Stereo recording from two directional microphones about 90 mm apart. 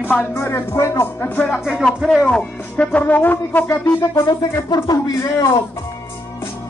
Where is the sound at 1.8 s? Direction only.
Centre (ahead or behind).